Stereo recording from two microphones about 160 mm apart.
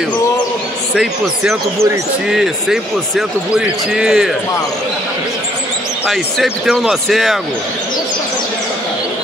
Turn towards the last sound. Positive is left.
turn(degrees=0)  # may be behind; listen again after turning